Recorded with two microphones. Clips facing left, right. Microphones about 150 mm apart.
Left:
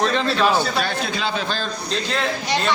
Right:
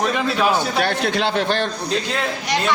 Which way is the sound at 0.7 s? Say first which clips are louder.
Right 4 dB; 65° right (ahead or behind).